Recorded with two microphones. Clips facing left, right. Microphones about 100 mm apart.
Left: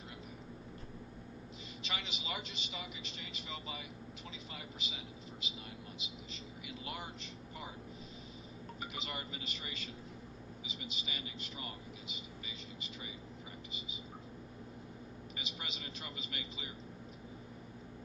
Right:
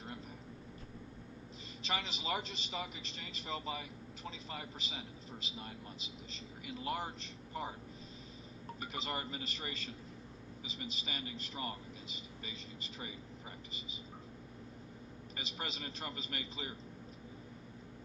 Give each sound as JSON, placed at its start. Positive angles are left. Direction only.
{"t": 1.8, "sound": "speech", "side_deg": -35}
{"t": 8.8, "sound": "speech", "side_deg": -40}
{"t": 15.4, "sound": "speech", "side_deg": -40}